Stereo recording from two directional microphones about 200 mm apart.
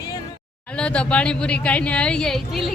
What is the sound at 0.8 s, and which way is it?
Speech, 5° left (ahead or behind).